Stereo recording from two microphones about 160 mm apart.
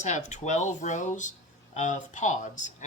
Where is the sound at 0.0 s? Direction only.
45° left (ahead or behind).